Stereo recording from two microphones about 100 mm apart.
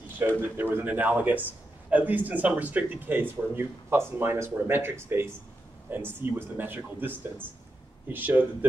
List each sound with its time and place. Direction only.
0.6 s a man's voice: 20° right (ahead or behind)